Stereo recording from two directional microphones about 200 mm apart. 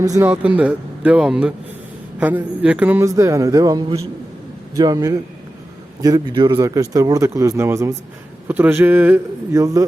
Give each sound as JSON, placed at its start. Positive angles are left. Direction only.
{"t": 0.2, "sound": "speech", "side_deg": -10}